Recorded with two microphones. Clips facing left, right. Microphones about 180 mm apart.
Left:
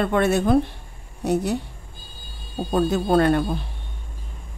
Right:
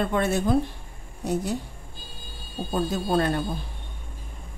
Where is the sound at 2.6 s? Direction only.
65° left (ahead or behind).